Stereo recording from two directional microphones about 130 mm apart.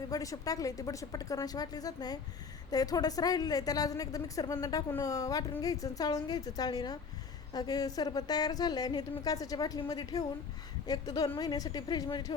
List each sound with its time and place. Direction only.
0.1 s a woman's voice: 25° left (ahead or behind)